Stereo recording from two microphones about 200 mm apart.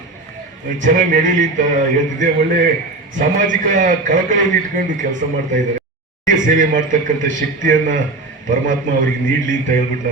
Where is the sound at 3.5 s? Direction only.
40° right (ahead or behind).